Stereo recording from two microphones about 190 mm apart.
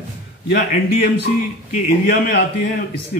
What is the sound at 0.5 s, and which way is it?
Speech, 50° left (ahead or behind).